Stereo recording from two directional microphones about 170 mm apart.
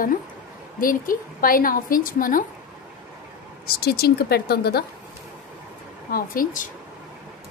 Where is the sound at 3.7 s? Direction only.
70° left (ahead or behind).